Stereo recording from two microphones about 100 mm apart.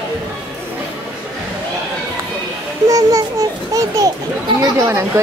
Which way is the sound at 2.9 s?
35° right (ahead or behind).